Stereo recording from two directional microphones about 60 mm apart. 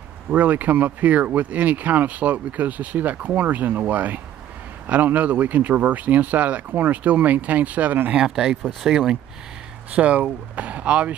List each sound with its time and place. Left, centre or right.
0.3 s speech: right
8.2 s speech: centre
9.8 s speech: right